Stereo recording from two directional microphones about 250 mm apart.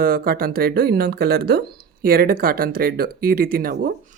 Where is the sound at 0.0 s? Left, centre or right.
Right.